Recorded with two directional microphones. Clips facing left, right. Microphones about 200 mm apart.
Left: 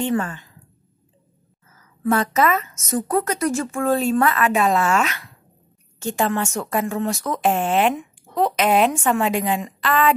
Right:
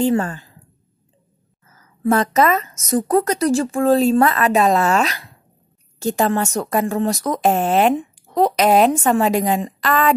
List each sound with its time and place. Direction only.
0.0 s a woman's voice: 35° right (ahead or behind)
1.8 s speech: 40° right (ahead or behind)